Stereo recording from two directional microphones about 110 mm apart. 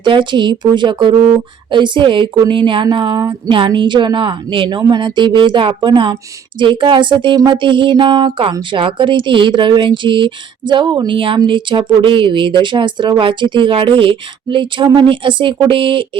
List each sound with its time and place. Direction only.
0.0 s speech: 45° right (ahead or behind)